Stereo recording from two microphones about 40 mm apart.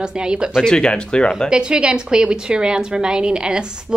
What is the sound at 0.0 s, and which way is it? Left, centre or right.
Speech, right.